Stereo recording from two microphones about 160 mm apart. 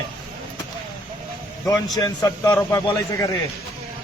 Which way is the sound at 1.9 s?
20° left (ahead or behind).